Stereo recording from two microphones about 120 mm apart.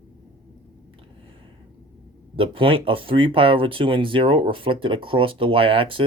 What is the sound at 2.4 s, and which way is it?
Speech, 45° right (ahead or behind).